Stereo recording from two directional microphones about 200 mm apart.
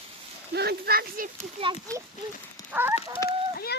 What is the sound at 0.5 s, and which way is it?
Speech, 55° right (ahead or behind).